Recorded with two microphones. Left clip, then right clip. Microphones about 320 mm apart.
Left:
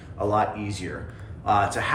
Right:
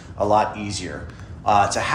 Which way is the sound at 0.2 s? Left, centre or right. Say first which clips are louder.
Right 5 dB; centre.